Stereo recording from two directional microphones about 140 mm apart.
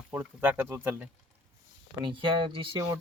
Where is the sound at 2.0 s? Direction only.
35° right (ahead or behind).